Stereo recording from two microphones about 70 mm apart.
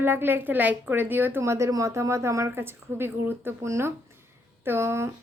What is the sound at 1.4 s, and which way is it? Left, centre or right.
Speech, right.